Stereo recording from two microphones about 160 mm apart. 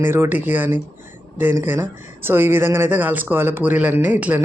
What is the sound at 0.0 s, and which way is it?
Speech, 15° right (ahead or behind).